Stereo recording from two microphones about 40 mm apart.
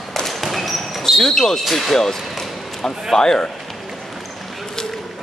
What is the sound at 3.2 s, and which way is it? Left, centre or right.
Speech, centre.